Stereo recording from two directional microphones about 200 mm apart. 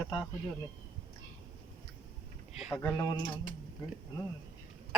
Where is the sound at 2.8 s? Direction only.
15° left (ahead or behind).